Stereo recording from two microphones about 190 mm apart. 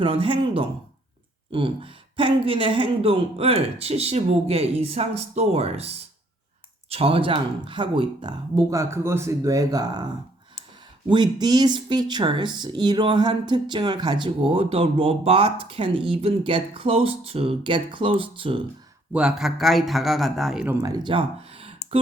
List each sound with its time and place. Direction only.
0.0 s speech: 25° right (ahead or behind)
6.9 s speech: 30° right (ahead or behind)
11.1 s speech: 20° right (ahead or behind)
19.1 s a man's voice: 5° right (ahead or behind)
20.8 s speech: 20° right (ahead or behind)